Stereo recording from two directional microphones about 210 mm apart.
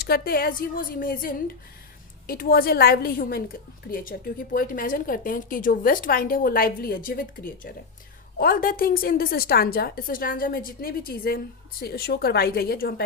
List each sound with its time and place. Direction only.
0.0 s a woman's voice: 45° left (ahead or behind)